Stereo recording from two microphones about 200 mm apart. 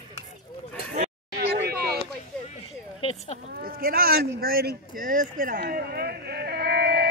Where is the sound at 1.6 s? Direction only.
50° right (ahead or behind).